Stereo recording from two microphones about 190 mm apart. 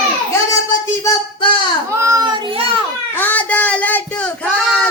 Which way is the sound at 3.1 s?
10° left (ahead or behind).